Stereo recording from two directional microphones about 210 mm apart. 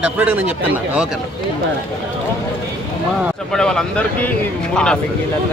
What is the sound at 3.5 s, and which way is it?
A man's voice, 5° left (ahead or behind).